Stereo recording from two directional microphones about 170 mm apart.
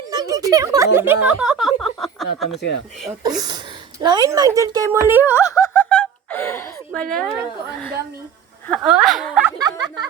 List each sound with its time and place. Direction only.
0.1 s speech: 20° right (ahead or behind); by 2.6 s centre (ahead or behind)
3.2 s speech: 25° right (ahead or behind)
5.3 s laughter: 15° left (ahead or behind)
6.9 s speech: 5° left (ahead or behind)
8.8 s speech: 5° right (ahead or behind)
9.6 s speech: 25° right (ahead or behind)